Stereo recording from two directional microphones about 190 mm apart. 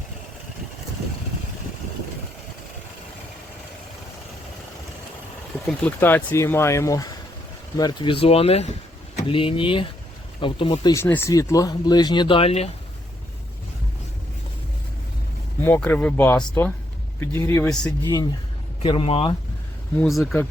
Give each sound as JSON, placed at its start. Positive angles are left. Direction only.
{"t": 5.6, "sound": "speech", "side_deg": 10}
{"t": 11.0, "sound": "speech", "side_deg": 10}
{"t": 15.6, "sound": "speech", "side_deg": 10}
{"t": 18.8, "sound": "speech", "side_deg": 30}
{"t": 20.0, "sound": "speech", "side_deg": 0}